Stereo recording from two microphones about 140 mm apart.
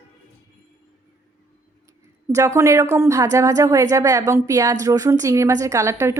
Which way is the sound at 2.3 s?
20° right (ahead or behind).